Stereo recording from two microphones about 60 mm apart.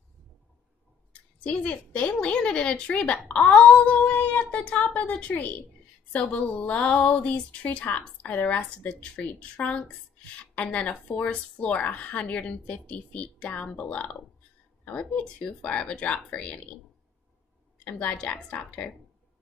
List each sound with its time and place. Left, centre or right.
1.4 s a woman's voice: left
17.9 s a woman's voice: centre